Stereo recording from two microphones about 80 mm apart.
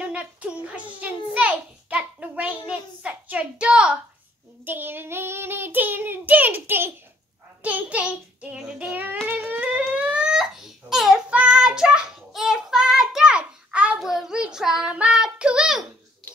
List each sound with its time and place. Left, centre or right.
0.1 s a sound: centre
4.6 s child singing: right
9.9 s crying: centre
11.2 s child singing: centre